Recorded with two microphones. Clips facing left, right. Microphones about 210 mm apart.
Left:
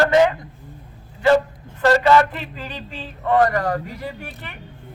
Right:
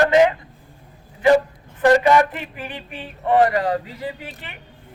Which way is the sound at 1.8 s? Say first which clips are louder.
Right 1 dB; 15° right (ahead or behind).